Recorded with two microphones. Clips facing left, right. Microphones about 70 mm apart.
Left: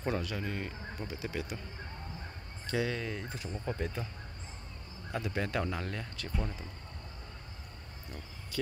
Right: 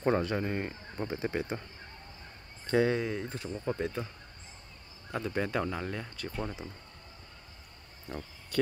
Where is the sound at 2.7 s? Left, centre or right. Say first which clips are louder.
Right 7 dB; right.